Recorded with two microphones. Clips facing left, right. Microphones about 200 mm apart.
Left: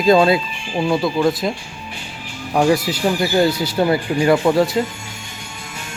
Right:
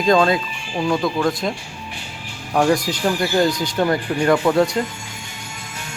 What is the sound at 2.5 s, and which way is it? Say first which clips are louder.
Speech: left 1 dB; 5° left (ahead or behind).